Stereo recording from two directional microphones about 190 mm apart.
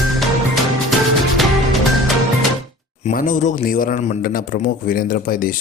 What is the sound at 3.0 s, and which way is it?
A man's voice, 45° left (ahead or behind).